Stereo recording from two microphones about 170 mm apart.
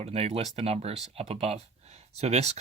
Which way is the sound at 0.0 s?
35° right (ahead or behind).